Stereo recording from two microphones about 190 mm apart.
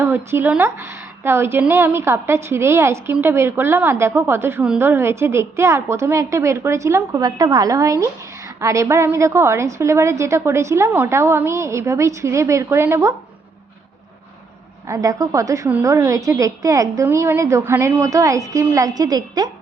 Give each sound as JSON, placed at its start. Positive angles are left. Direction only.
{"t": 0.0, "sound": "a woman's voice", "side_deg": -10}
{"t": 14.8, "sound": "a woman's voice", "side_deg": -15}